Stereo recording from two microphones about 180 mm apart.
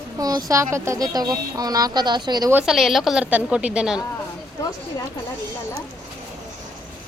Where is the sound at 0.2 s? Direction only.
20° right (ahead or behind).